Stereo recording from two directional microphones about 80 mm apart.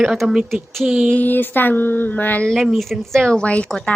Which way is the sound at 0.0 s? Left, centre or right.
Centre.